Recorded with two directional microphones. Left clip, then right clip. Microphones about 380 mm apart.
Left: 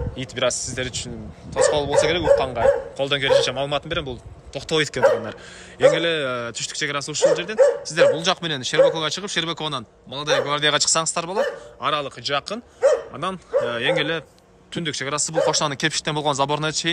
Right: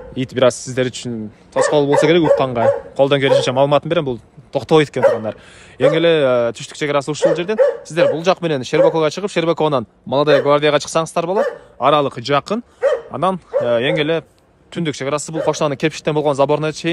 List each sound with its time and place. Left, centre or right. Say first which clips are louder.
0.1 s a man's voice: right 9 dB; centre